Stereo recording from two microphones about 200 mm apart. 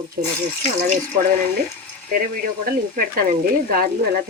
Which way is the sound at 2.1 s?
45° right (ahead or behind).